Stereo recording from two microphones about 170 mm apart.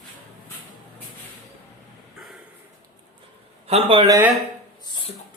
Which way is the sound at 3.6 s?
35° right (ahead or behind).